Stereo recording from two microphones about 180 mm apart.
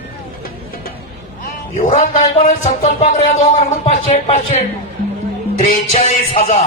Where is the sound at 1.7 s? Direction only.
40° left (ahead or behind).